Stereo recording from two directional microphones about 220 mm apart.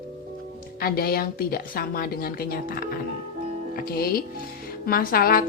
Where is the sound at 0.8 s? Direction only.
40° left (ahead or behind).